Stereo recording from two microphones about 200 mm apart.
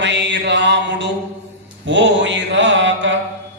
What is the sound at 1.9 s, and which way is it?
Mantra, 65° right (ahead or behind).